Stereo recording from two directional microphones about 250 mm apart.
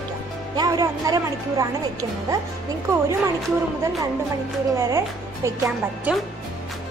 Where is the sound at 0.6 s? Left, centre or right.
Centre.